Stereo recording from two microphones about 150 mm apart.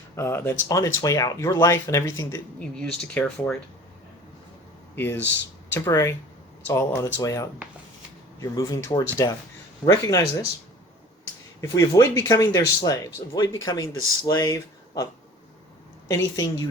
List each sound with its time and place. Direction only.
0.2 s speech: 15° left (ahead or behind)
2.6 s speech: 5° left (ahead or behind)
4.9 s speech: 15° left (ahead or behind)
11.6 s speech: 20° left (ahead or behind)
16.0 s speech: 20° left (ahead or behind)